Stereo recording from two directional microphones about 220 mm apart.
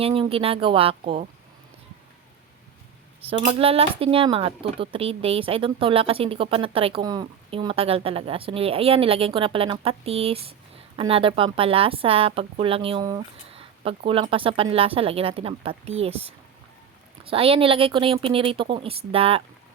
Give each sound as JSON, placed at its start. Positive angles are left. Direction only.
{"t": 0.0, "sound": "speech", "side_deg": -25}
{"t": 3.2, "sound": "speech", "side_deg": -30}